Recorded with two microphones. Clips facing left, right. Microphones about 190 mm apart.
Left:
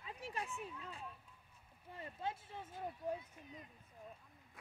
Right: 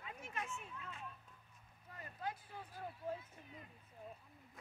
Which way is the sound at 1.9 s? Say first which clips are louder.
Left 2 dB; 25° left (ahead or behind).